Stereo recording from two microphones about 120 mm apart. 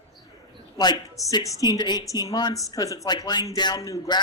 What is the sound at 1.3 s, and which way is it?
Speech, 30° left (ahead or behind).